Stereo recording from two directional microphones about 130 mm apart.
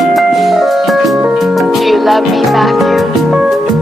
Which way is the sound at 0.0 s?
Centre (ahead or behind).